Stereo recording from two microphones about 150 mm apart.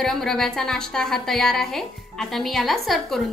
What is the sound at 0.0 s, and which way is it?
A woman's voice, centre (ahead or behind).